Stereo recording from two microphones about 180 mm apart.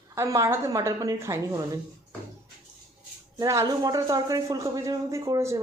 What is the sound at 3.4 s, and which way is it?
Speech, 20° right (ahead or behind).